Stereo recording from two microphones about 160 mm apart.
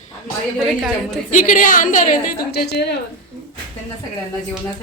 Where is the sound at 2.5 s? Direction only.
90° left.